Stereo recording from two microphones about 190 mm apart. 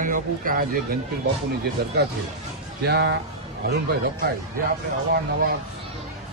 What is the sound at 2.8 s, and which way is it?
Speech, 60° right (ahead or behind).